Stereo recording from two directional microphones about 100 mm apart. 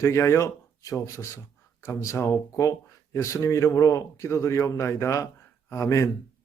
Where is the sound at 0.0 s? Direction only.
30° left (ahead or behind).